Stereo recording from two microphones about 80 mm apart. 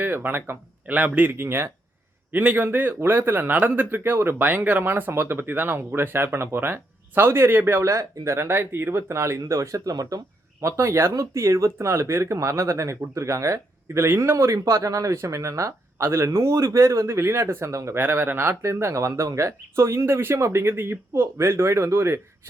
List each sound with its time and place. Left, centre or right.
0.0 s speech: right
7.9 s speech: right
10.6 s speech: right
16.3 s speech: right
17.9 s speech: right